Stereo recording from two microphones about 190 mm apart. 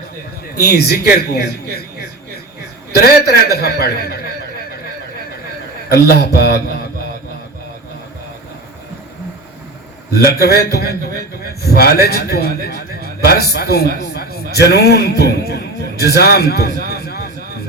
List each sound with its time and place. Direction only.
0.5 s a man's voice: 55° left (ahead or behind)
5.9 s a man's voice: 55° left (ahead or behind)
10.2 s a man's voice: 55° left (ahead or behind)
16.9 s a sound: 55° left (ahead or behind)